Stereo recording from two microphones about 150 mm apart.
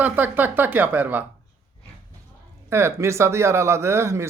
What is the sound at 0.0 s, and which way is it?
Speech, 10° right (ahead or behind).